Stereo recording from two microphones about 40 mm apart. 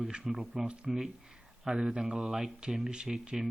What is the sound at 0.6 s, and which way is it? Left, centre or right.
Speech, right.